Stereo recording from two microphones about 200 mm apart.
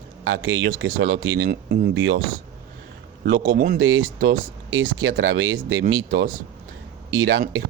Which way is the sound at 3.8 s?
75° right (ahead or behind).